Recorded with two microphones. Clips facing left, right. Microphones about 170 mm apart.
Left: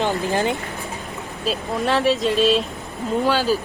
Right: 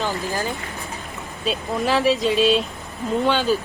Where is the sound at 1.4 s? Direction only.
Centre (ahead or behind).